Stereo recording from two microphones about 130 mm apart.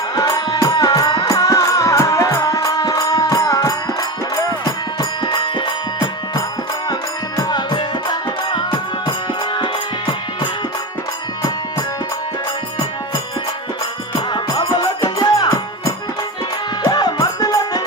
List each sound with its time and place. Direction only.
0.2 s music: 30° left (ahead or behind)
14.3 s music: 35° left (ahead or behind)